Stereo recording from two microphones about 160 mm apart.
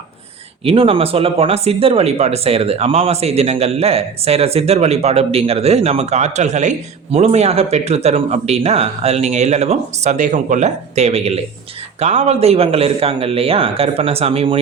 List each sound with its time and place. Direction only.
0.6 s speech: 35° right (ahead or behind)